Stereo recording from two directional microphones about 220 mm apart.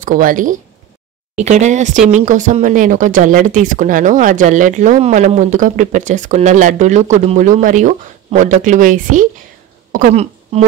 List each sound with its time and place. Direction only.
0.0 s speech: 40° right (ahead or behind)